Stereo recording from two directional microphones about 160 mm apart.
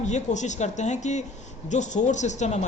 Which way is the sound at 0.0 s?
45° left (ahead or behind).